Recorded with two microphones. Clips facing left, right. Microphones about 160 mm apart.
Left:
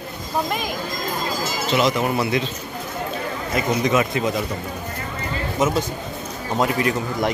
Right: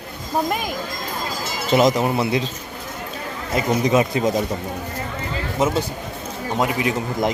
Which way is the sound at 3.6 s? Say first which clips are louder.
Right 2 dB; 30° right (ahead or behind).